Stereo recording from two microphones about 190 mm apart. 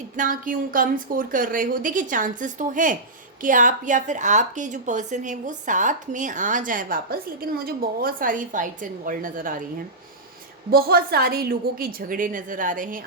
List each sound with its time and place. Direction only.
0.2 s a woman's voice: 45° right (ahead or behind)
10.7 s a woman's voice: 55° right (ahead or behind)